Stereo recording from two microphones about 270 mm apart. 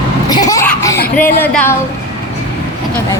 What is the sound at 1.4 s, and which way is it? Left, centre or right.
Speech, centre.